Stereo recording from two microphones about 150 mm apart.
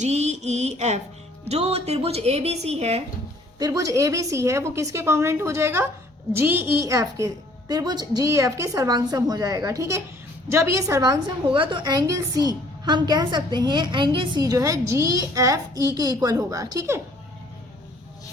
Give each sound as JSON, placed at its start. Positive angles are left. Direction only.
{"t": 0.0, "sound": "speech", "side_deg": -50}
{"t": 3.6, "sound": "a woman's voice", "side_deg": -20}